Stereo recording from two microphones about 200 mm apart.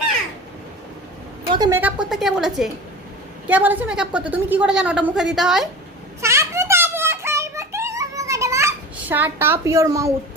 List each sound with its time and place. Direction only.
1.5 s a woman's voice: 20° right (ahead or behind)
1.8 s a woman's voice: 5° right (ahead or behind)
6.2 s a sound: 15° right (ahead or behind)